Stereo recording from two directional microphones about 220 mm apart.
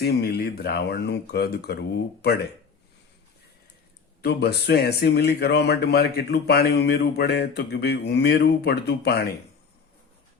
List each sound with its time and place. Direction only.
0.0 s speech: 45° left (ahead or behind)
4.2 s speech: 45° left (ahead or behind)